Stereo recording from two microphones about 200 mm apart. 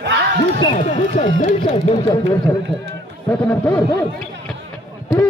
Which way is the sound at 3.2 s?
5° left (ahead or behind).